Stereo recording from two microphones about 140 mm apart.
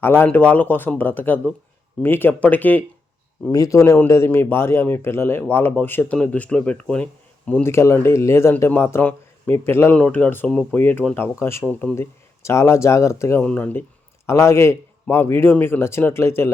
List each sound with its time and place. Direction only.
0.0 s speech: 15° left (ahead or behind)
3.5 s a man's voice: 25° left (ahead or behind)